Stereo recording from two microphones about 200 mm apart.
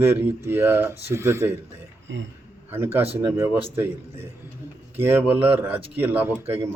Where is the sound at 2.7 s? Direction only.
10° right (ahead or behind).